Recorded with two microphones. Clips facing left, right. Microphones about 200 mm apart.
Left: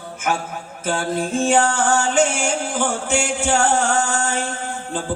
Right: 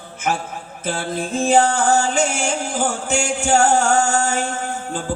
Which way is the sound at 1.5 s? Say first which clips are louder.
Right 4 dB; 35° right (ahead or behind).